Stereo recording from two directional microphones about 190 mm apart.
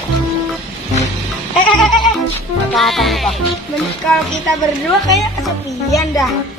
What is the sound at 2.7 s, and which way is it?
Speech, centre (ahead or behind).